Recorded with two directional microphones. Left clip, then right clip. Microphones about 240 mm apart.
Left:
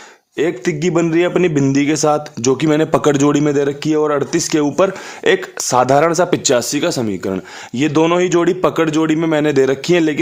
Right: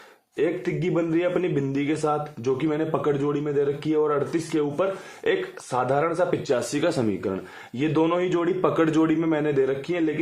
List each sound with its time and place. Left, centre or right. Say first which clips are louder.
0.3 s a man's voice: left 7 dB; left